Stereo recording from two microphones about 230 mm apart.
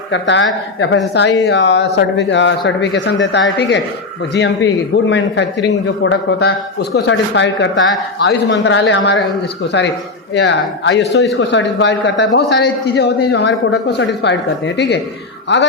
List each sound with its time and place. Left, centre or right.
0.1 s speech: left